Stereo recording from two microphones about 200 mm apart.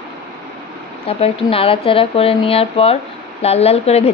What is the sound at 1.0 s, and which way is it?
A woman's voice, 30° left (ahead or behind).